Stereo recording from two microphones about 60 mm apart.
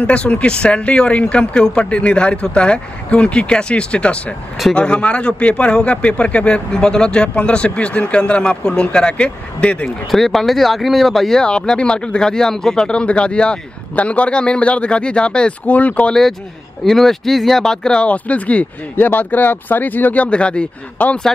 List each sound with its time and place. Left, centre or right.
0.0 s a man's voice: centre
10.1 s speech: centre
11.4 s speech: centre
16.8 s speech: centre; by 20.2 s left
20.2 s speech: centre